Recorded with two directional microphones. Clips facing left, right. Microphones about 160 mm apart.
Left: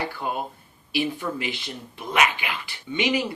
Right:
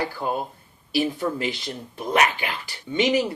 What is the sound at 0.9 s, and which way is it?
Speech, 40° right (ahead or behind).